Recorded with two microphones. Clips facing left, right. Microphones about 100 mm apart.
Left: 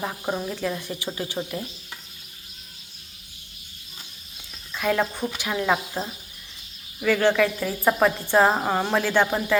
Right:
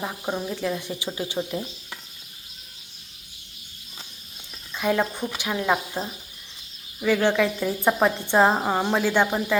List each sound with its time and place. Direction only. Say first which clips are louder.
0.0 s speech: left 1 dB; centre (ahead or behind)
0.8 s speech: right 1 dB; 15° right (ahead or behind)
4.7 s speech: even; 15° right (ahead or behind)
7.0 s speech: left 1 dB; 15° right (ahead or behind)